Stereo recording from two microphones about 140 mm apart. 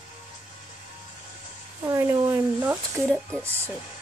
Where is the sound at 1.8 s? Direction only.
20° right (ahead or behind).